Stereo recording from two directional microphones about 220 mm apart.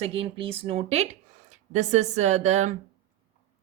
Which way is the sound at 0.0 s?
25° right (ahead or behind).